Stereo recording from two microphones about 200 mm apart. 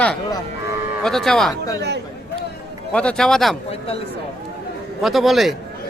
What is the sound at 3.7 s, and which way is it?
Speech, 30° left (ahead or behind).